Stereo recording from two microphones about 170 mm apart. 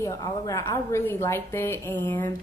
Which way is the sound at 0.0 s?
20° left (ahead or behind).